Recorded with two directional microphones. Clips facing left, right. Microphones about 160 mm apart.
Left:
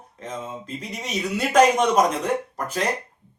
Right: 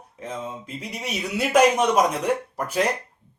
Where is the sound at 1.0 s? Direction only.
10° right (ahead or behind).